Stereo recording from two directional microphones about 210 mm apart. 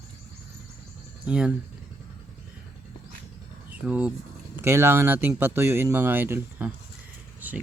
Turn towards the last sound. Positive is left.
turn(degrees=-10)  # may be behind; listen again after turning